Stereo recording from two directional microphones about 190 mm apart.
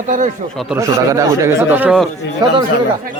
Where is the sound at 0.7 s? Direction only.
15° right (ahead or behind).